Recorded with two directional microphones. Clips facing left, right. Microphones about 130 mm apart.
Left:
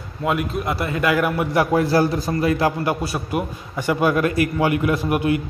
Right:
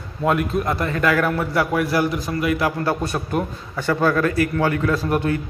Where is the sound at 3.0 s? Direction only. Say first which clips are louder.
Right 1 dB; 5° left (ahead or behind).